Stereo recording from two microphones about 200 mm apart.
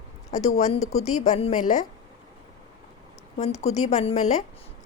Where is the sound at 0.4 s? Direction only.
30° left (ahead or behind).